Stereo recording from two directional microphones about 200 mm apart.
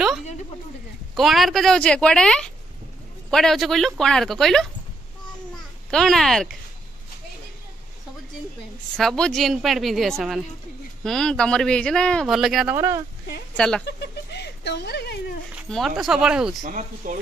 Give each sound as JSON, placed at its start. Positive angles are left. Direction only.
{"t": 1.1, "sound": "speech", "side_deg": 0}
{"t": 5.9, "sound": "speech", "side_deg": 0}
{"t": 8.9, "sound": "speech", "side_deg": 5}
{"t": 12.7, "sound": "speech", "side_deg": -15}
{"t": 13.6, "sound": "speech", "side_deg": 5}
{"t": 13.8, "sound": "a sound", "side_deg": 55}
{"t": 15.5, "sound": "speech", "side_deg": 0}
{"t": 16.6, "sound": "speech", "side_deg": -40}